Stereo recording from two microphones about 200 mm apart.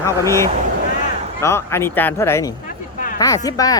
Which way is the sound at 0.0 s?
15° left (ahead or behind).